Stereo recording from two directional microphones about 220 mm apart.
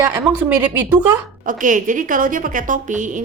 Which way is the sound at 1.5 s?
35° right (ahead or behind).